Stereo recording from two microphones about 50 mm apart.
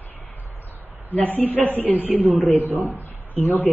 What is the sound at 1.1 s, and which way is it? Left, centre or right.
Speech, left.